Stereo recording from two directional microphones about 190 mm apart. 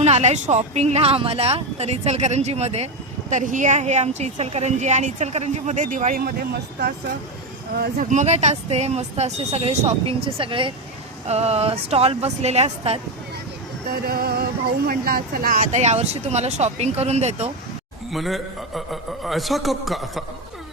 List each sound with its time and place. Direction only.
0.0 s speech: 35° right (ahead or behind); by 7.2 s 55° right (ahead or behind)
7.9 s speech: 35° right (ahead or behind)
13.9 s music: 55° right (ahead or behind)
14.8 s speech: 50° right (ahead or behind); by 17.5 s 35° right (ahead or behind)
18.1 s a man's voice: centre (ahead or behind)